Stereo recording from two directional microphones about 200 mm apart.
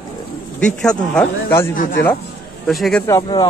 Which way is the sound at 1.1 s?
5° left (ahead or behind).